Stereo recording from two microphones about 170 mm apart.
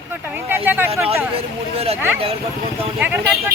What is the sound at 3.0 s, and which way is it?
Speech, 10° right (ahead or behind).